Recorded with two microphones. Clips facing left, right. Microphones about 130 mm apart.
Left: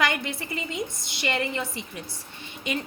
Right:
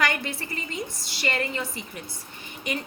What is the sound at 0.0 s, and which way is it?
Speech, 20° left (ahead or behind).